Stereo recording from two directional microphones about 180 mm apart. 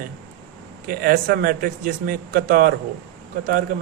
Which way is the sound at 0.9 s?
55° right (ahead or behind).